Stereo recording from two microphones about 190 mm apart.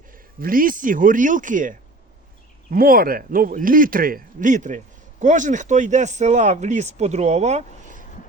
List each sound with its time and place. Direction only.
0.1 s a man's voice: 50° right (ahead or behind)